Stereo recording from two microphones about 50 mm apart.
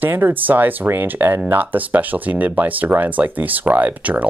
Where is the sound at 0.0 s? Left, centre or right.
Right.